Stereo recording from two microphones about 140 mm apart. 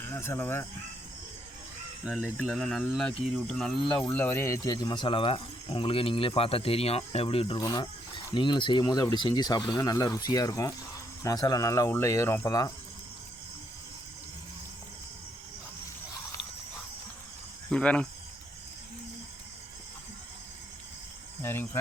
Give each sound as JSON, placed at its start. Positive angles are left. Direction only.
{"t": 0.1, "sound": "speech", "side_deg": 15}
{"t": 2.4, "sound": "speech", "side_deg": 0}
{"t": 7.6, "sound": "speech", "side_deg": 30}
{"t": 17.7, "sound": "speech", "side_deg": 5}
{"t": 21.4, "sound": "speech", "side_deg": 15}